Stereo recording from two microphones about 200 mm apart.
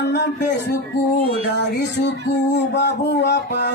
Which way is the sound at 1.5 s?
60° left (ahead or behind).